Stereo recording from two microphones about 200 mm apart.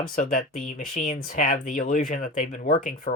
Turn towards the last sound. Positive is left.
turn(degrees=45)  # may be behind; listen again after turning